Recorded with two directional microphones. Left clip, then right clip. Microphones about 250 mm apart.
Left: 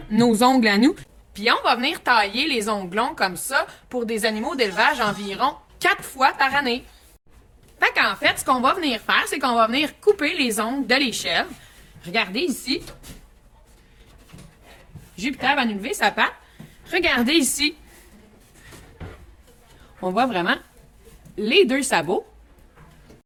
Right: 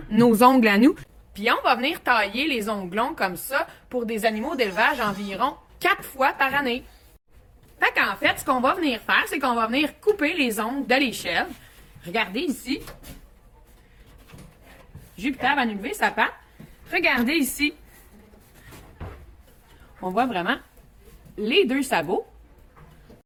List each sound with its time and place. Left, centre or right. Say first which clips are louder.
0.2 s speech: right 1 dB; centre
1.3 s a woman's voice: left 2 dB; centre
7.8 s a woman's voice: left 2 dB; centre
15.1 s speech: left 2 dB; left
20.0 s speech: left 3 dB; left